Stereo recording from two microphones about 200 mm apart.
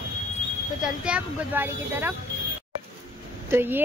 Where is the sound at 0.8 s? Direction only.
5° right (ahead or behind).